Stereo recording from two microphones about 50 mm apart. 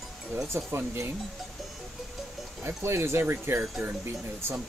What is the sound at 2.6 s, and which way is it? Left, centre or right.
Speech, right.